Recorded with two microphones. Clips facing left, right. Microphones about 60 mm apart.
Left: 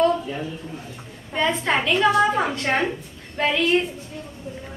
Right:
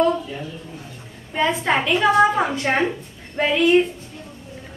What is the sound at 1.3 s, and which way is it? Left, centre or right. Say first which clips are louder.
A woman's voice: right 2 dB; centre.